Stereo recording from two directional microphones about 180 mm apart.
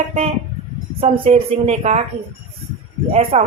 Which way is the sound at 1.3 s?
40° right (ahead or behind).